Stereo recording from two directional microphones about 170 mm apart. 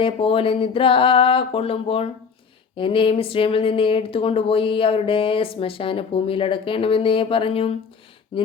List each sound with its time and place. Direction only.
0.0 s speech: 35° left (ahead or behind)